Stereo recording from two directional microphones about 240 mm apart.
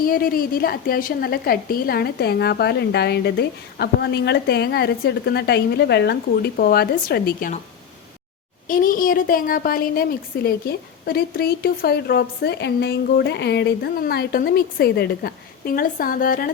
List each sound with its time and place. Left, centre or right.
0.0 s a woman's voice: left
8.6 s a woman's voice: left